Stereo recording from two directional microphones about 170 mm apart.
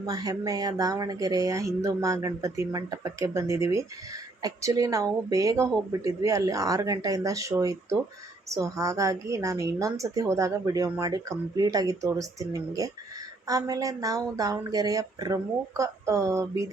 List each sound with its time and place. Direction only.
0.0 s speech: 20° right (ahead or behind)